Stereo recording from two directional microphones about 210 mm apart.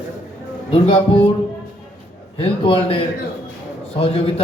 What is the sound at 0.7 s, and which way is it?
Speech, 25° left (ahead or behind).